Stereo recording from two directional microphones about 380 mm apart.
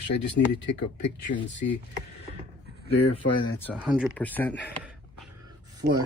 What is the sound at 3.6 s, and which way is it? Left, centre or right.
Speech, centre.